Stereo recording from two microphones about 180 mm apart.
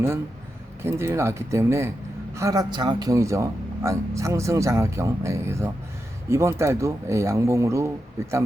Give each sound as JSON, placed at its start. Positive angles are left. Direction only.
{"t": 0.8, "sound": "speech", "side_deg": -15}